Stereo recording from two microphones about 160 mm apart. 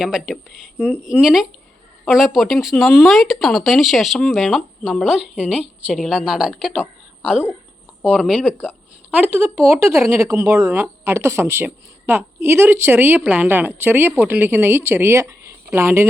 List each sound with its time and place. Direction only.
0.0 s speech: 5° right (ahead or behind)